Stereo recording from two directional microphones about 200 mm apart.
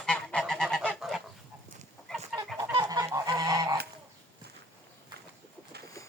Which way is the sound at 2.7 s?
20° right (ahead or behind).